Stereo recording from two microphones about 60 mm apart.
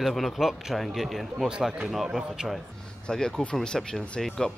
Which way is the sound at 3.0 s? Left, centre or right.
Centre.